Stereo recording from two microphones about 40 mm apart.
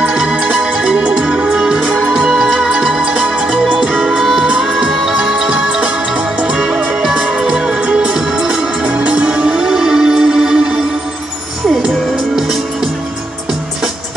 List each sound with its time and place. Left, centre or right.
0.0 s music: right
8.8 s music: right
9.6 s music: centre
12.4 s music: centre